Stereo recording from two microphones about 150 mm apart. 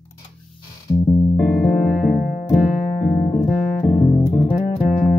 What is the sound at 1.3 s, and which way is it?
Music, 5° left (ahead or behind).